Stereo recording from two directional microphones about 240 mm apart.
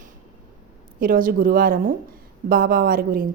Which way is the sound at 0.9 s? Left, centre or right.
Right.